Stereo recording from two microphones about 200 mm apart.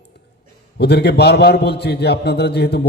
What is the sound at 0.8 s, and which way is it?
A man's voice, 55° left (ahead or behind).